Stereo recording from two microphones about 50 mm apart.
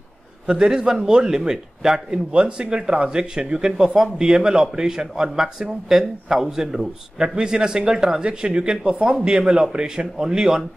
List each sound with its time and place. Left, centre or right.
0.5 s a man's voice: centre